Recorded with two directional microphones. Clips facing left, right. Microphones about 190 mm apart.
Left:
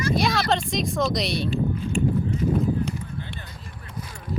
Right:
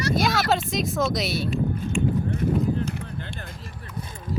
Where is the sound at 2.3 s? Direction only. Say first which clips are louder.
Left 1 dB; 60° right (ahead or behind).